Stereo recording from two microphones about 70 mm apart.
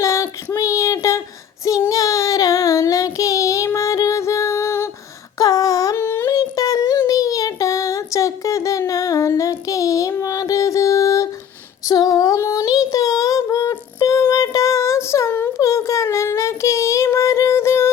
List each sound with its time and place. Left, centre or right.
0.0 s a sound: left
1.9 s child singing: left
3.8 s music: left
5.4 s a sound: left
6.0 s humming: left
6.3 s humming: left
7.1 s child singing: left
8.9 s a sound: left
11.9 s female singing: left
12.4 s child singing: left